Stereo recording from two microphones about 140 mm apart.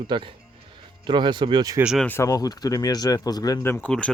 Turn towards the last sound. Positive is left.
turn(degrees=5)  # may be behind; listen again after turning